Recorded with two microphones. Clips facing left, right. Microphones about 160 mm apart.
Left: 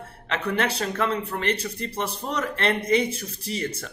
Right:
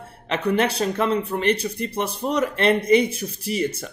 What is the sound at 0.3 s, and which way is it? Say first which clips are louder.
Speech: right 4 dB; 15° right (ahead or behind).